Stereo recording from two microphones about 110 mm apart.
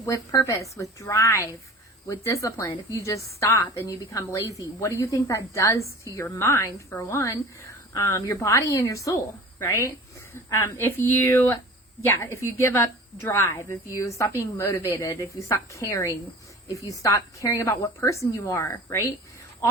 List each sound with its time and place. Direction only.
0.0 s a woman's voice: 30° left (ahead or behind)